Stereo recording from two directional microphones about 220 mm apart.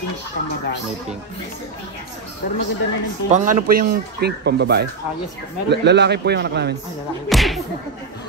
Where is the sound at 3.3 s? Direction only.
40° right (ahead or behind).